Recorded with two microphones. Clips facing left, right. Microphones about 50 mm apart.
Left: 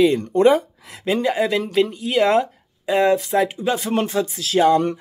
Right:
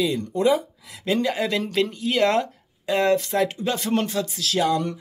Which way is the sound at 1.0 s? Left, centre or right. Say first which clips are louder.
Left 3 dB; left.